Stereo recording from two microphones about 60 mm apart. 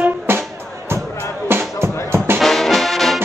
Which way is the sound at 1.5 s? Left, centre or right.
Right.